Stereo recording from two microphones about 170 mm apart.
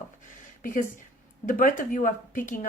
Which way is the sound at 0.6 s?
55° left (ahead or behind).